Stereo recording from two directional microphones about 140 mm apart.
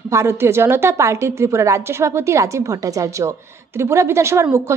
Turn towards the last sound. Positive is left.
turn(degrees=-20)  # may be behind; listen again after turning